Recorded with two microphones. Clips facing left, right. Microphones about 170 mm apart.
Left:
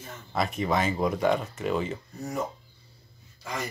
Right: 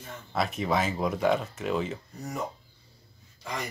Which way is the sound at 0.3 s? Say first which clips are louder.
Left 1 dB; centre (ahead or behind).